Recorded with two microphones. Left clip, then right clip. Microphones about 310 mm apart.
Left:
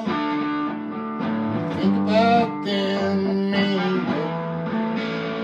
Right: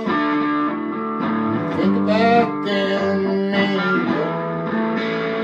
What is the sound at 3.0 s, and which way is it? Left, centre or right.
Music, centre.